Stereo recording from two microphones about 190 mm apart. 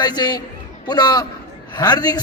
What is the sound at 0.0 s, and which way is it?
A man's voice, 20° left (ahead or behind).